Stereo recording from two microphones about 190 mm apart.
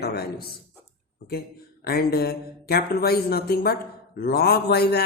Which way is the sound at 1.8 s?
55° left (ahead or behind).